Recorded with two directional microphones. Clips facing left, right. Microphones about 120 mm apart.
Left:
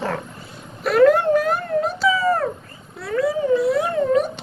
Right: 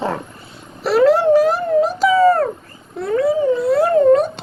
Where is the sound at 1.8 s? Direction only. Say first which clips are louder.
Right 6 dB; 40° right (ahead or behind).